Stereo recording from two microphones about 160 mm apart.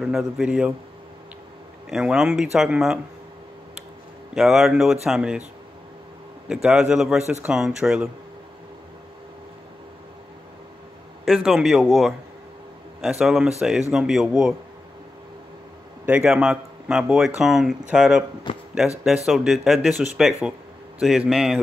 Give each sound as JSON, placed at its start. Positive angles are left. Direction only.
{"t": 0.0, "sound": "speech", "side_deg": -5}
{"t": 1.9, "sound": "speech", "side_deg": -5}
{"t": 4.3, "sound": "speech", "side_deg": 0}
{"t": 6.5, "sound": "speech", "side_deg": -5}
{"t": 11.2, "sound": "speech", "side_deg": 0}
{"t": 16.1, "sound": "speech", "side_deg": -10}
{"t": 18.5, "sound": "speech", "side_deg": 30}
{"t": 19.2, "sound": "speech", "side_deg": 0}